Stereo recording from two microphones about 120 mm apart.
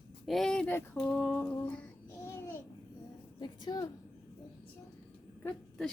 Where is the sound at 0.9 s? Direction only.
10° left (ahead or behind).